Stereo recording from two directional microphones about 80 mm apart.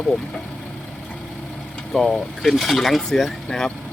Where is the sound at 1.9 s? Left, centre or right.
Centre.